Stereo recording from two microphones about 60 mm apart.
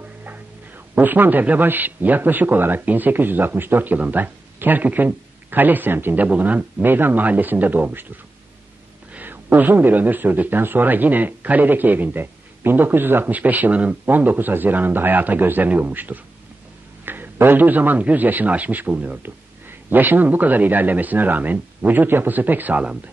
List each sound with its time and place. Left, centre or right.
0.9 s a man's voice: right
9.1 s a man's voice: right